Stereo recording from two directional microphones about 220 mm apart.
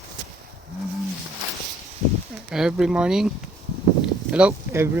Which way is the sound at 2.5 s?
5° right (ahead or behind).